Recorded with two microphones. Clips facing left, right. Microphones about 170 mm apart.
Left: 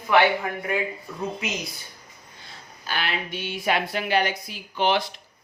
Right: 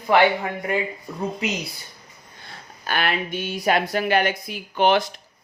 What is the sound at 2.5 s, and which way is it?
Speech, 55° right (ahead or behind).